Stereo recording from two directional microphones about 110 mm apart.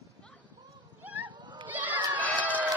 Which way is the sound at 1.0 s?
15° right (ahead or behind).